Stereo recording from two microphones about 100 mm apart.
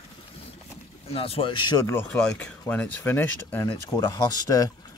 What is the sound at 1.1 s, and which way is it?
Speech, 70° left (ahead or behind).